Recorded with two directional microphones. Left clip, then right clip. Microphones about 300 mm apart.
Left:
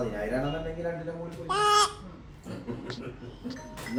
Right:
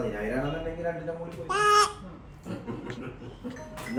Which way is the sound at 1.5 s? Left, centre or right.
Centre.